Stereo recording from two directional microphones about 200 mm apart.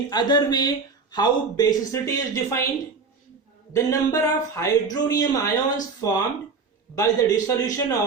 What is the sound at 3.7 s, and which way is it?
Speech, 15° left (ahead or behind).